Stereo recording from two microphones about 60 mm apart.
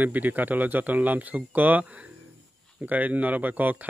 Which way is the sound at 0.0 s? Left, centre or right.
Right.